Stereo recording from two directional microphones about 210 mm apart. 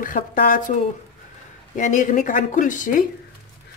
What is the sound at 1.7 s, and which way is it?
A woman's voice, 35° left (ahead or behind).